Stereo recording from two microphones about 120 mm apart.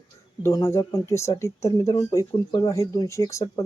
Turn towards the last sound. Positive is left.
turn(degrees=30)  # may be behind; listen again after turning